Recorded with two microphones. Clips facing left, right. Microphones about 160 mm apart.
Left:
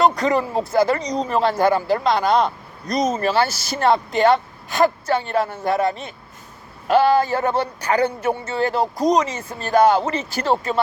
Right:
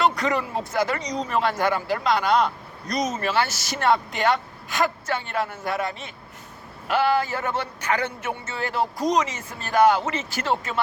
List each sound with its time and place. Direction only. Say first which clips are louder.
0.0 s a man's voice: left 5 dB; 35° left (ahead or behind)